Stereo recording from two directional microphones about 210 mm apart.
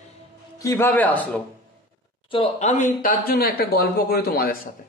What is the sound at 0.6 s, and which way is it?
Speech, 15° left (ahead or behind).